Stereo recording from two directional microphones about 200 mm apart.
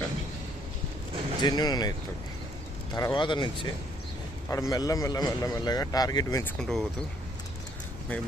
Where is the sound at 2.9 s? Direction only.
20° left (ahead or behind).